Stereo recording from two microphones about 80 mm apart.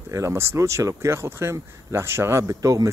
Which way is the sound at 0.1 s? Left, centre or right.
Right.